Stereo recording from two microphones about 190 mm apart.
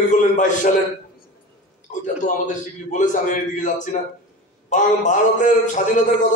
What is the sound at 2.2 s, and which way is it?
A man's voice, 40° left (ahead or behind).